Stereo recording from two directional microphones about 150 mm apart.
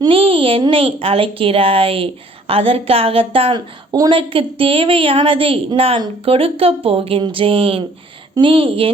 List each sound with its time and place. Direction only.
0.0 s a woman's voice: 35° right (ahead or behind)